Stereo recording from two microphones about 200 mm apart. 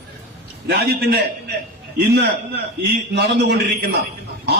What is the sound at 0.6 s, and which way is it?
Speech, 50° right (ahead or behind).